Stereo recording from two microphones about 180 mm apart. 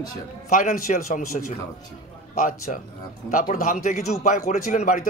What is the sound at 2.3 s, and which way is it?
Speech, 50° left (ahead or behind).